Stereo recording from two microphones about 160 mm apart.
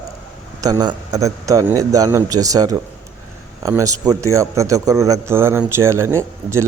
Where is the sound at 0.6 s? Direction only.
25° right (ahead or behind).